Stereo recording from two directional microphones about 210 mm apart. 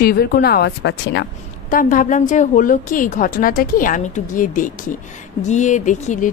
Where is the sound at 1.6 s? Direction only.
40° left (ahead or behind).